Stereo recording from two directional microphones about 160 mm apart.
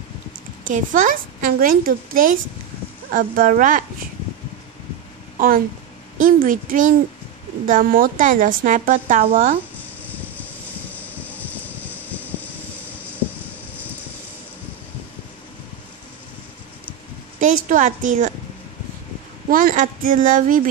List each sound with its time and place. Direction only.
0.7 s a woman's voice: 55° right (ahead or behind)
6.2 s a woman's voice: 60° right (ahead or behind)
10.1 s vehicle: 10° left (ahead or behind)
13.0 s a sound: 10° right (ahead or behind)
17.4 s a woman's voice: 55° right (ahead or behind)
19.5 s a woman's voice: 60° right (ahead or behind)